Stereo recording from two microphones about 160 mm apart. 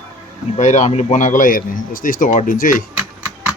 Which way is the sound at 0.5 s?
50° left (ahead or behind).